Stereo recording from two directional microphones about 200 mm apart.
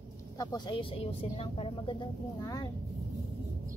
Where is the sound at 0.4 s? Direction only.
20° left (ahead or behind).